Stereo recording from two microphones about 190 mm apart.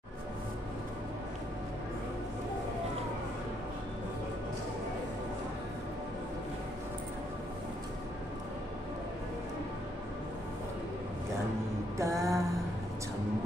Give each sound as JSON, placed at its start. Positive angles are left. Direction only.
{"t": 12.0, "sound": "mantra", "side_deg": -15}